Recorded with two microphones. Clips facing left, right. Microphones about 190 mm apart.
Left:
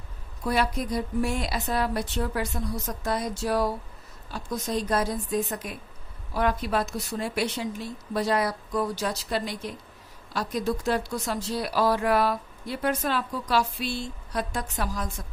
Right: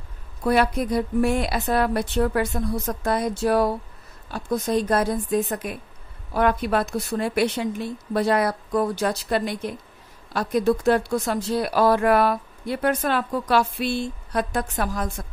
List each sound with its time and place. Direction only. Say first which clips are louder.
0.4 s speech: right 6 dB; 60° right (ahead or behind)